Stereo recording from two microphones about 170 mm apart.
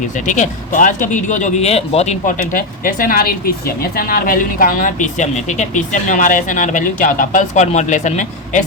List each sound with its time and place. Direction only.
0.3 s speech: 50° left (ahead or behind)